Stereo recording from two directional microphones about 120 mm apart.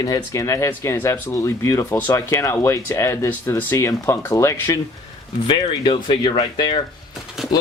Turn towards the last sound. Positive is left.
turn(degrees=-5)  # may be behind; listen again after turning